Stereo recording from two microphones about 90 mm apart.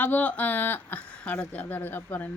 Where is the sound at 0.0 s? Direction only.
20° left (ahead or behind).